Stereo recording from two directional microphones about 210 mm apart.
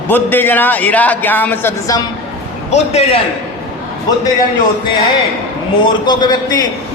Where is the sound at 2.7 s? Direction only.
30° left (ahead or behind).